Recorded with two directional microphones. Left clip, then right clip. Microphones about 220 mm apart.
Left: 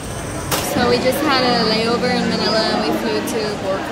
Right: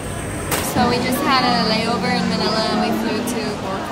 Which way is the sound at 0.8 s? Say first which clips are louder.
Left 3 dB; 15° right (ahead or behind).